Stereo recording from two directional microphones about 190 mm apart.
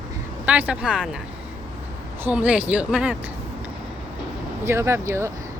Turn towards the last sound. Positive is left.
turn(degrees=-15)  # may be behind; listen again after turning